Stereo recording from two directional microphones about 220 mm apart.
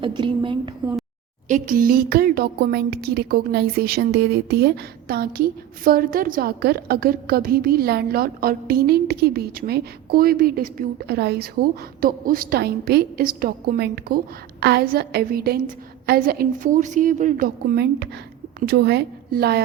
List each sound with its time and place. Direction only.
0.0 s a woman's voice: 20° right (ahead or behind)
1.5 s a woman's voice: 35° right (ahead or behind)